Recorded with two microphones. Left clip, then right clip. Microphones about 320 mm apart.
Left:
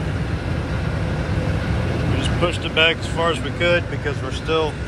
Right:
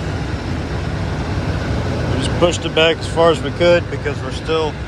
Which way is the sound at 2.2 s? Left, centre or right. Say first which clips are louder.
Right 8 dB; centre.